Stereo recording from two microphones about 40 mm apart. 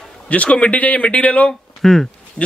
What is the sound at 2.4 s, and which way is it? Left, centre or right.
Speech, left.